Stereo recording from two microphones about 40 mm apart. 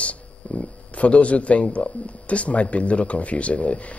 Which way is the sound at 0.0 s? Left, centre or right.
Left.